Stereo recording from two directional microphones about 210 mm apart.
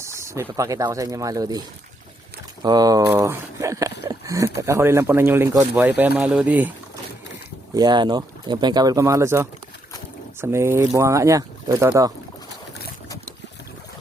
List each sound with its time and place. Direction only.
0.0 s speech: 15° right (ahead or behind)
2.6 s speech: 20° right (ahead or behind)
7.7 s speech: 20° right (ahead or behind)